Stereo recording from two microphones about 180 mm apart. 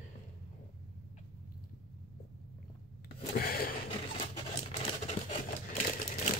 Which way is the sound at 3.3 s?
55° left (ahead or behind).